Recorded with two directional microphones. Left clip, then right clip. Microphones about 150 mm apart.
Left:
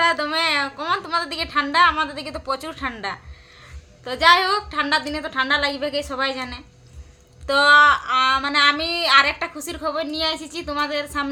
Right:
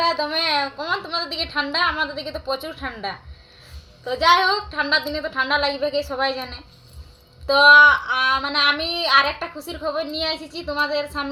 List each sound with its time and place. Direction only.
0.1 s a woman's voice: 15° left (ahead or behind)
4.0 s female singing: 20° left (ahead or behind)
6.1 s a woman's voice: 15° left (ahead or behind)
7.4 s female singing: 20° left (ahead or behind)